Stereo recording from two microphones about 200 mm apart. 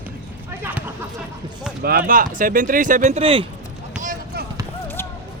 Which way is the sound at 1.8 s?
50° right (ahead or behind).